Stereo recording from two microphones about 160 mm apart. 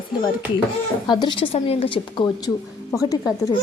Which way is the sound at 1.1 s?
30° left (ahead or behind).